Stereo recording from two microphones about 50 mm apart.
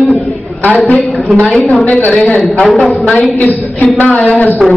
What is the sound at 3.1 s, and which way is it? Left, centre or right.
Speech, left.